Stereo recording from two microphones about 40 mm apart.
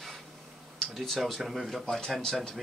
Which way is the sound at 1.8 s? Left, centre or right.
Centre.